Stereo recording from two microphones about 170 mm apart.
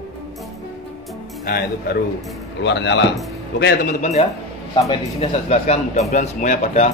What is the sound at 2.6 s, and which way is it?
Speech, 90° left.